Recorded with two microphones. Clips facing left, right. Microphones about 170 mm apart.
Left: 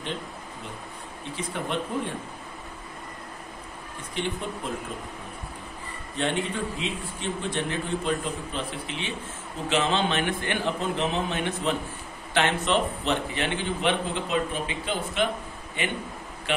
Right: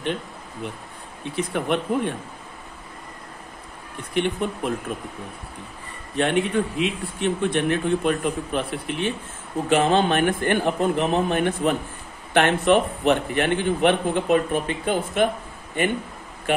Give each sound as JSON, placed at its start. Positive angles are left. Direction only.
{"t": 1.3, "sound": "a man's voice", "side_deg": -65}
{"t": 4.1, "sound": "a man's voice", "side_deg": -65}
{"t": 6.1, "sound": "a man's voice", "side_deg": -60}